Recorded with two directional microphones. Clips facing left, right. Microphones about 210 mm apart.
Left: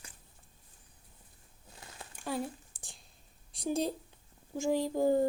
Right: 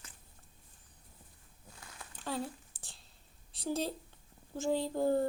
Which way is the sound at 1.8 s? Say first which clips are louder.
Left 3 dB; 25° left (ahead or behind).